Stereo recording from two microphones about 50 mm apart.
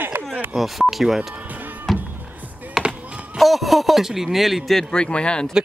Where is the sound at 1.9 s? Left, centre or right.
Centre.